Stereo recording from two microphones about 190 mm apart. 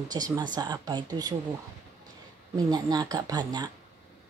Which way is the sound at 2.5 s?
20° right (ahead or behind).